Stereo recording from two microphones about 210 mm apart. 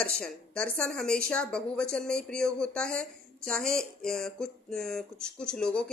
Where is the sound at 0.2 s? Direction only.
5° left (ahead or behind).